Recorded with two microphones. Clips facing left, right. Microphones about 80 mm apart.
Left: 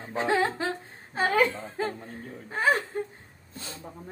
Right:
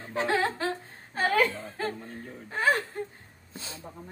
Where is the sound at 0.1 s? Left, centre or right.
Left.